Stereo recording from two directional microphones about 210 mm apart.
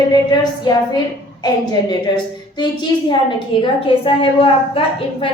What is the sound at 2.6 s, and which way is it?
A woman's voice, 20° left (ahead or behind).